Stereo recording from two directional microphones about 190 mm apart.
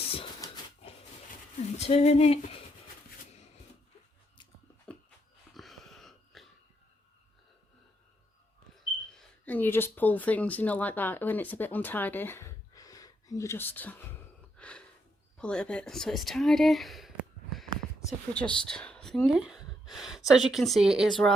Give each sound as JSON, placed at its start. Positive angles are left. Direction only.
{"t": 0.4, "sound": "dog", "side_deg": 25}
{"t": 1.8, "sound": "speech", "side_deg": 35}
{"t": 5.5, "sound": "wheeze", "side_deg": 0}
{"t": 8.8, "sound": "speech", "side_deg": 5}
{"t": 14.5, "sound": "gasp", "side_deg": 5}
{"t": 15.4, "sound": "speech", "side_deg": 5}